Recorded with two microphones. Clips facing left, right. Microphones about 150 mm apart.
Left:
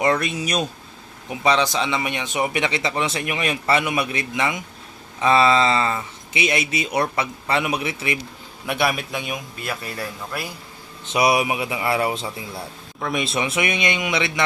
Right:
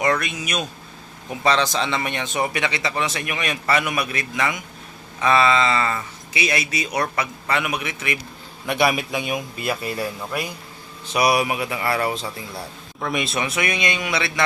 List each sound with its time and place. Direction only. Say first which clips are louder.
0.0 s speech: left 2 dB; 30° left (ahead or behind)
1.3 s speech: left 1 dB; 15° left (ahead or behind); by 8.2 s 30° left (ahead or behind)
8.6 s a man's voice: right 2 dB; centre (ahead or behind)
9.6 s speech: right 4 dB; 15° right (ahead or behind)
11.0 s speech: even; 20° left (ahead or behind)
13.0 s a man's voice: even; centre (ahead or behind)
13.4 s speech: left 1 dB; 25° left (ahead or behind)